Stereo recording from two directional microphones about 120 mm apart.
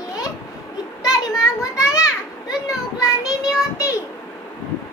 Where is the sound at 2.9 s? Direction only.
30° left (ahead or behind).